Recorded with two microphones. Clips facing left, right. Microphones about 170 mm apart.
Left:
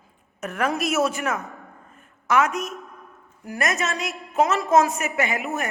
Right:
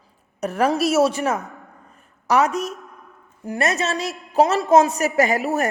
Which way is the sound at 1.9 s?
40° right (ahead or behind).